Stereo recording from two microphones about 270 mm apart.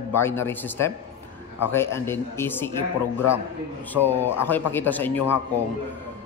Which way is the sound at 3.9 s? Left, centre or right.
Centre.